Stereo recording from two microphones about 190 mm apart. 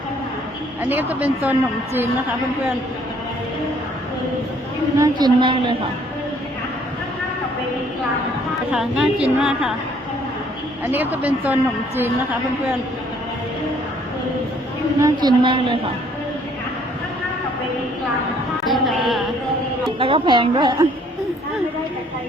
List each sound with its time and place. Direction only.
0.8 s a woman's voice: 10° right (ahead or behind)
4.9 s a woman's voice: 20° right (ahead or behind)
8.7 s a woman's voice: 5° right (ahead or behind)
10.9 s a woman's voice: 10° right (ahead or behind)
15.0 s a woman's voice: 25° right (ahead or behind)
18.6 s a woman's voice: centre (ahead or behind)
20.0 s a woman's voice: 30° right (ahead or behind)